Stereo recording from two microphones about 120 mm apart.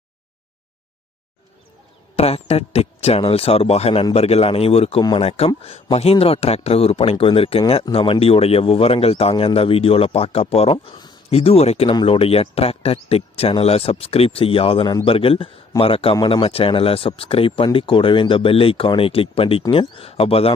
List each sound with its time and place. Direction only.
2.1 s a man's voice: 60° left (ahead or behind)
11.3 s a man's voice: 60° left (ahead or behind)
11.9 s speech: 45° left (ahead or behind)